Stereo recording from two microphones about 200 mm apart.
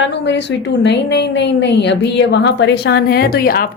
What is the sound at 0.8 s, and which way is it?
A woman's voice, 60° left (ahead or behind).